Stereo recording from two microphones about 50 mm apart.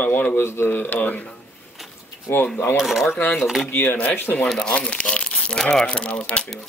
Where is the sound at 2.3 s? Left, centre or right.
Left.